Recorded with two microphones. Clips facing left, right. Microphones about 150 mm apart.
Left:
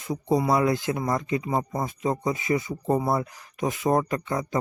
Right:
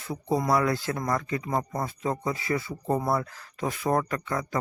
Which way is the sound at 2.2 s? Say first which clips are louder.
Left 3 dB; 20° left (ahead or behind).